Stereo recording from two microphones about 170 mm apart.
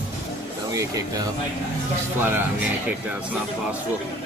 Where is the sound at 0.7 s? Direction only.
20° right (ahead or behind).